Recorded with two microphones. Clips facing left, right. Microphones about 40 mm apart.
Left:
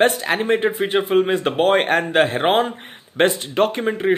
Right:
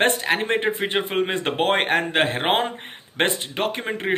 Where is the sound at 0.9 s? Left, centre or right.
Right.